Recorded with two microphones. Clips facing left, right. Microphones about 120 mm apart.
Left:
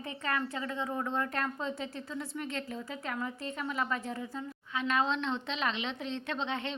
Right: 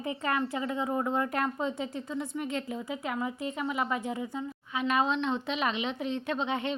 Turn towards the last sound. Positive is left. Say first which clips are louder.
# right 4 dB
turn(degrees=-10)  # may be behind; listen again after turning